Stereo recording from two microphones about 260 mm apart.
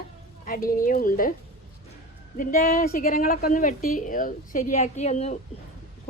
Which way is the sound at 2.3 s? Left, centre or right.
Left.